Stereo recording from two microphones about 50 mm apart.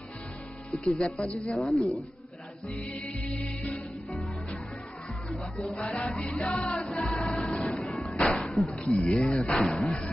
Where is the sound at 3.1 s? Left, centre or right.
Left.